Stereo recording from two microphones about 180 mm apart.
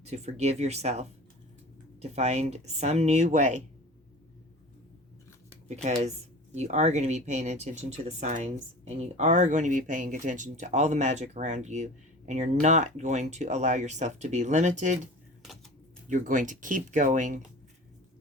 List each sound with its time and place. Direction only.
0.1 s speech: 40° right (ahead or behind)
5.6 s speech: 40° right (ahead or behind)
16.1 s speech: 45° right (ahead or behind)